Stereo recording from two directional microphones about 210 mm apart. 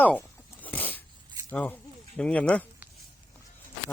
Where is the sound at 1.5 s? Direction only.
10° left (ahead or behind).